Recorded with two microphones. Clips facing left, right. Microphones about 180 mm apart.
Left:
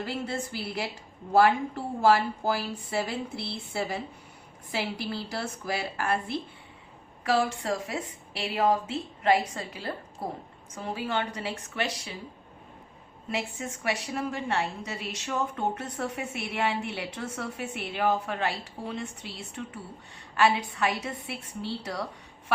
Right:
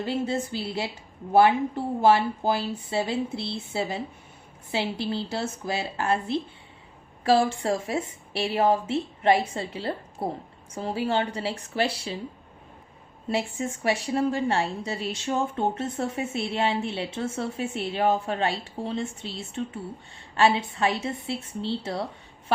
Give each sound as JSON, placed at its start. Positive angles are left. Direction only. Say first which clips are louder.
{"t": 0.0, "sound": "a woman's voice", "louder": "right 5 dB", "side_deg": -20}
{"t": 13.2, "sound": "a woman's voice", "louder": "right 5 dB", "side_deg": -30}